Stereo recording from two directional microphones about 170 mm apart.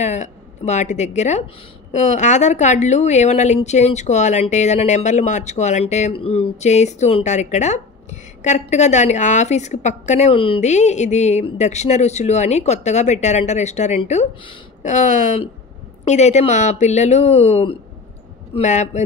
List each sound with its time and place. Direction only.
0.0 s a woman's voice: 45° left (ahead or behind)